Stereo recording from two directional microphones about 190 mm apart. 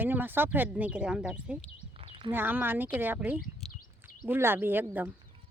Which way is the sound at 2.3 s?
10° right (ahead or behind).